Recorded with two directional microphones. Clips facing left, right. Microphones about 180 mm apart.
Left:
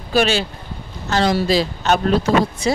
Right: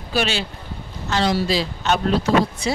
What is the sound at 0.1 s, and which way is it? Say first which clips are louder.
Speech: left 5 dB; 45° left (ahead or behind).